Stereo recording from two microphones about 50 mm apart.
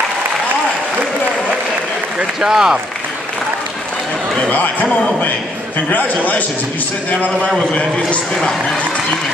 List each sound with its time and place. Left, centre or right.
2.1 s speech: centre
4.4 s a man's voice: left
8.4 s speech: centre